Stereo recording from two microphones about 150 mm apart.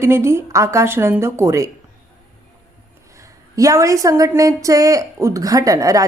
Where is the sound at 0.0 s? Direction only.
15° right (ahead or behind).